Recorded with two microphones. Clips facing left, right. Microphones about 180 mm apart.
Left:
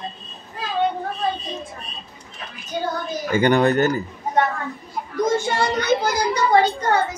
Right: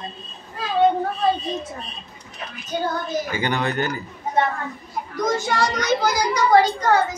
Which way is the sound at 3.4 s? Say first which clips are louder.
Left 11 dB; 50° left (ahead or behind).